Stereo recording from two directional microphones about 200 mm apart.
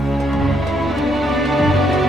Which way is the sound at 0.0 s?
Centre (ahead or behind).